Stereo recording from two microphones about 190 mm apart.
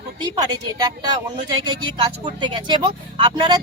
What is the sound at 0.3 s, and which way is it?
Speech, 20° right (ahead or behind).